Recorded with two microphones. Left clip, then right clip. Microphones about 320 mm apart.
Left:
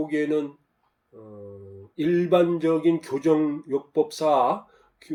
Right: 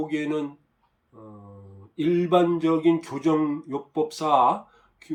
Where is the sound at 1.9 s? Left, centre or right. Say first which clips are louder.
Left 1 dB; centre.